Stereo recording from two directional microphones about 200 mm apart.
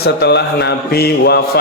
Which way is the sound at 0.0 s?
55° left (ahead or behind).